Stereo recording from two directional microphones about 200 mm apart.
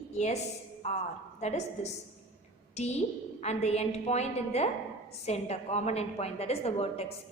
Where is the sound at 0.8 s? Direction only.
35° left (ahead or behind).